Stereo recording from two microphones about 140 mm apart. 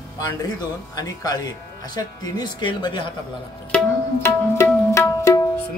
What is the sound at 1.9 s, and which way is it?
Speech, 30° left (ahead or behind).